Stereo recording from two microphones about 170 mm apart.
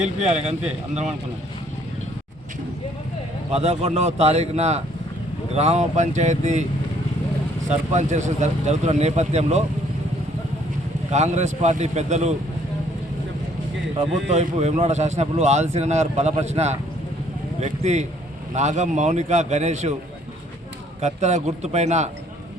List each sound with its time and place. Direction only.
0.0 s speech: 40° right (ahead or behind)
3.5 s a man's voice: 40° right (ahead or behind)
7.7 s speech: 45° right (ahead or behind)
11.1 s a man's voice: 40° right (ahead or behind)
14.3 s a man's voice: 40° right (ahead or behind)
21.0 s a man's voice: 45° right (ahead or behind)